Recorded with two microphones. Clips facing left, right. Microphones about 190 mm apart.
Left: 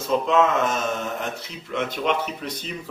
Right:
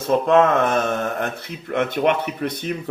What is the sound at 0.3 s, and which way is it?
Speech, 55° right (ahead or behind).